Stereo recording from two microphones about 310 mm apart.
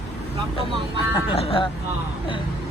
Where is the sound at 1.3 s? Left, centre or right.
Centre.